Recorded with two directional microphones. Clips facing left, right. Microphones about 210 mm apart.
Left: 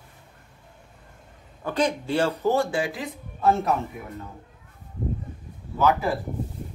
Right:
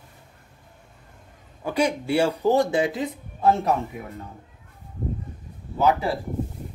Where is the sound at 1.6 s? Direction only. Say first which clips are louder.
Right 1 dB; 10° right (ahead or behind).